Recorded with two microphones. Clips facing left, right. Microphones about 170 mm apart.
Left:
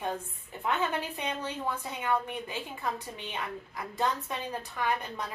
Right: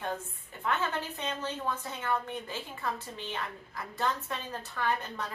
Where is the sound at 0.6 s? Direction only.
15° left (ahead or behind).